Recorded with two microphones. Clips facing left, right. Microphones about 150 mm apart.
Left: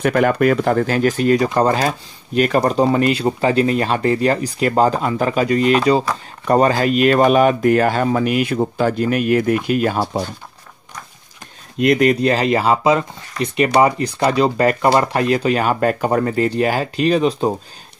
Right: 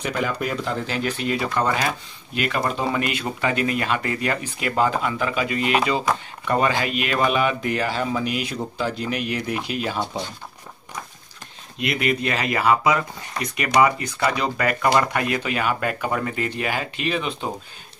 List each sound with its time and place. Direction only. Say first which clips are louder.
0.0 s speech: left 10 dB; 60° left (ahead or behind)
11.8 s speech: left 9 dB; 40° left (ahead or behind)